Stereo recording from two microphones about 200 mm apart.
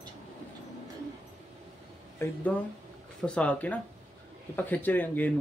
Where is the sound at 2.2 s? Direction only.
15° left (ahead or behind).